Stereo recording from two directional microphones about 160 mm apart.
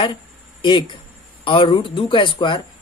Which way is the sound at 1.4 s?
35° left (ahead or behind).